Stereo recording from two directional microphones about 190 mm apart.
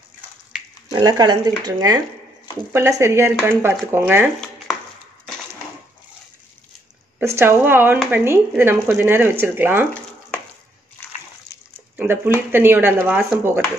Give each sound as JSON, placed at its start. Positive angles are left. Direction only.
{"t": 0.9, "sound": "speech", "side_deg": -20}
{"t": 7.2, "sound": "speech", "side_deg": -10}
{"t": 12.0, "sound": "speech", "side_deg": -10}